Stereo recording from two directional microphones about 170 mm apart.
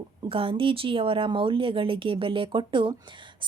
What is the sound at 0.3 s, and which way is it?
A woman's voice, 30° right (ahead or behind).